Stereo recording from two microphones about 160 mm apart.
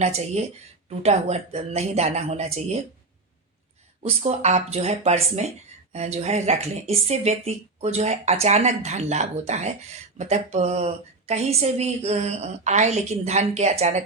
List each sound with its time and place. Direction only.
0.0 s speech: 45° right (ahead or behind)
4.0 s speech: 40° right (ahead or behind)